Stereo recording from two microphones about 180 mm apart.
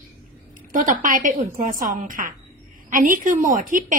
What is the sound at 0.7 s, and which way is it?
A woman's voice, 45° right (ahead or behind).